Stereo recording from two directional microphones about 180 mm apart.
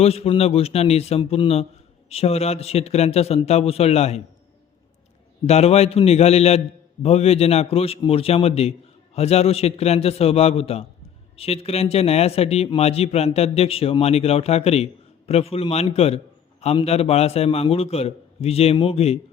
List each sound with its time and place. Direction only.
0.0 s a man's voice: 35° left (ahead or behind)
5.5 s a man's voice: 35° left (ahead or behind)